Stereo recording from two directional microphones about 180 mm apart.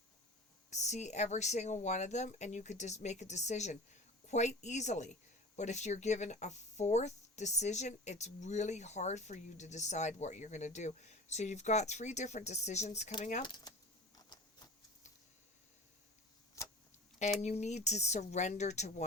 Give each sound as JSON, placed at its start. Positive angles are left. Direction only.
{"t": 0.7, "sound": "speech", "side_deg": 40}
{"t": 13.4, "sound": "speech", "side_deg": 25}
{"t": 14.2, "sound": "a sound", "side_deg": 20}
{"t": 17.4, "sound": "speech", "side_deg": 40}